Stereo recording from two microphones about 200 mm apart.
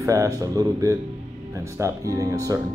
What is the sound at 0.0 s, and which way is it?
Speech, 15° right (ahead or behind).